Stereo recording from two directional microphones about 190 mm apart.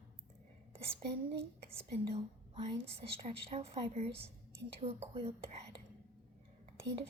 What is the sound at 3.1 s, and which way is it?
A woman's voice, 30° right (ahead or behind).